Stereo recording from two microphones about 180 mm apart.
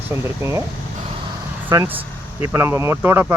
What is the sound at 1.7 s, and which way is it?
Speech, 20° right (ahead or behind).